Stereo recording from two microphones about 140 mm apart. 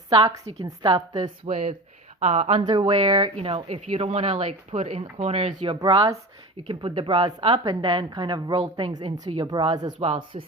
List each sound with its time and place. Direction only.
0.6 s a woman's voice: 30° right (ahead or behind)
2.1 s speech: 55° right (ahead or behind)
2.6 s a woman's voice: 35° right (ahead or behind)
3.3 s a woman's voice: 45° right (ahead or behind)